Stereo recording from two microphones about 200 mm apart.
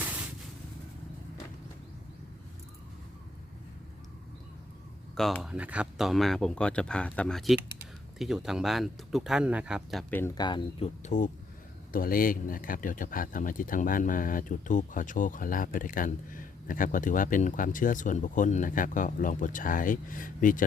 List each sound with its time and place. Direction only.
5.1 s speech: centre (ahead or behind); by 20.7 s 40° left (ahead or behind)